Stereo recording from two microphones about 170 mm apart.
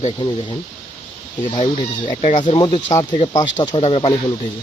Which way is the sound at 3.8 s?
35° left (ahead or behind).